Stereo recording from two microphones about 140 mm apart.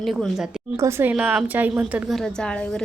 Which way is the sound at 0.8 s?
20° right (ahead or behind).